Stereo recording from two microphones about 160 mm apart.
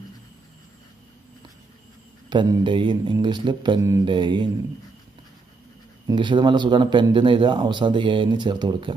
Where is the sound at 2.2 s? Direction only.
30° right (ahead or behind).